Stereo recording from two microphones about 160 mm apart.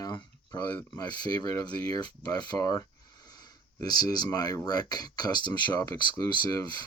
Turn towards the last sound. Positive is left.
turn(degrees=20)  # may be behind; listen again after turning